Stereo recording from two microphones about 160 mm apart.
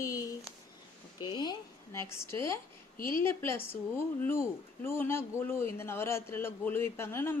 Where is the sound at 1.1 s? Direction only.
25° left (ahead or behind).